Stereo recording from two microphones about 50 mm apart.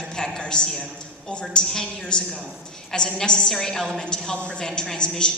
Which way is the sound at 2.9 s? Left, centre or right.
Centre.